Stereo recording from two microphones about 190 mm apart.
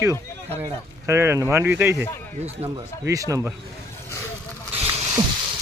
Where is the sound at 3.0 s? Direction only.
15° right (ahead or behind).